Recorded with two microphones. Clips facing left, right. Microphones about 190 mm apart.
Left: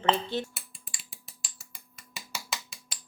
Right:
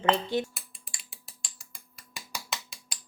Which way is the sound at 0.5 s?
Centre (ahead or behind).